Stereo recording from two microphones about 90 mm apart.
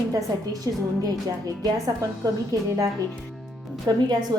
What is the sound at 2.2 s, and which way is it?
Speech, 40° right (ahead or behind).